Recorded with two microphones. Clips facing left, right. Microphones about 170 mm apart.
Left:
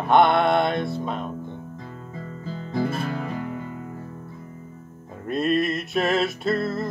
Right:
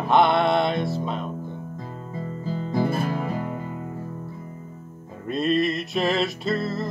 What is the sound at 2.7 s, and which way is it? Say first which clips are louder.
Music: right 1 dB; 15° right (ahead or behind).